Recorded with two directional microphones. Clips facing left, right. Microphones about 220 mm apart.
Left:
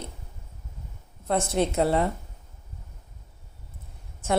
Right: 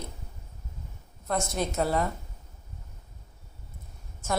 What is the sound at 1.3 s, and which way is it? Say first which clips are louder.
Speech: left 5 dB; 30° left (ahead or behind).